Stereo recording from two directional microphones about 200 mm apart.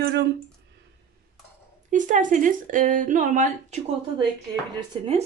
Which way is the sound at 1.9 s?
40° right (ahead or behind).